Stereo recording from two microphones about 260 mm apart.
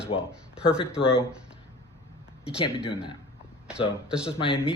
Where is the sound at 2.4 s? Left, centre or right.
Left.